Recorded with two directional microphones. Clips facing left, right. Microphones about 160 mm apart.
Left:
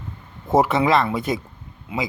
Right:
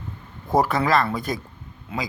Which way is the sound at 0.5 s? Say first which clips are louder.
Left 3 dB; 25° left (ahead or behind).